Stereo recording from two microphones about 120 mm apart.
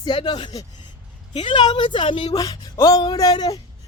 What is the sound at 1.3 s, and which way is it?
A woman's voice, 40° left (ahead or behind).